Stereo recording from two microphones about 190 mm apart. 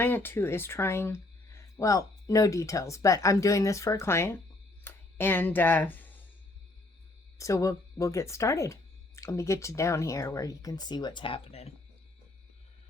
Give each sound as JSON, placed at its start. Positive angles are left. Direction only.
{"t": 0.0, "sound": "speech", "side_deg": 10}
{"t": 4.8, "sound": "a sound", "side_deg": 10}
{"t": 7.3, "sound": "speech", "side_deg": 15}